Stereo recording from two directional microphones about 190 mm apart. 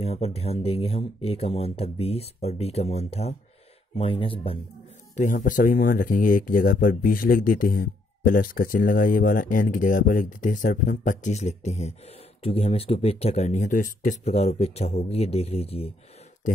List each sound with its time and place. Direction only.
0.0 s speech: 30° left (ahead or behind)
5.1 s speech: 40° left (ahead or behind)